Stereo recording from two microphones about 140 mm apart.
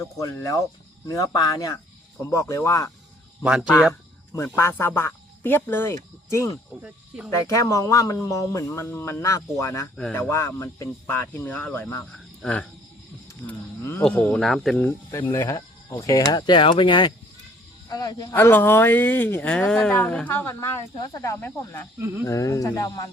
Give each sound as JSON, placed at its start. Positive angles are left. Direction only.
{"t": 0.0, "sound": "speech", "side_deg": 25}
{"t": 3.4, "sound": "speech", "side_deg": -5}
{"t": 4.4, "sound": "speech", "side_deg": 20}
{"t": 13.5, "sound": "cricket", "side_deg": 15}
{"t": 14.0, "sound": "speech", "side_deg": 10}
{"t": 14.8, "sound": "speech", "side_deg": 15}